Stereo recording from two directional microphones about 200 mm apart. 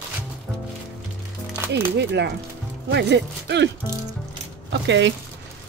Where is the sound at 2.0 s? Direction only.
60° right (ahead or behind).